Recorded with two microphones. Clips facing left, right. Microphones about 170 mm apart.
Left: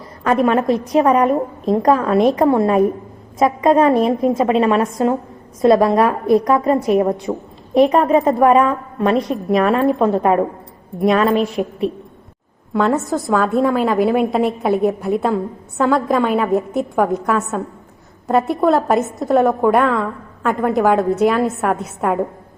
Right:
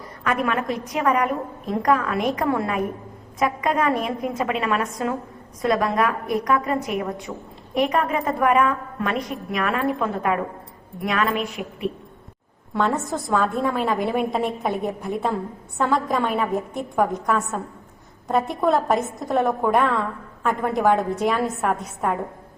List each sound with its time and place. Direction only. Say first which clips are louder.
0.3 s a woman's voice: left 8 dB; 30° left (ahead or behind)
13.2 s a woman's voice: left 6 dB; 5° left (ahead or behind)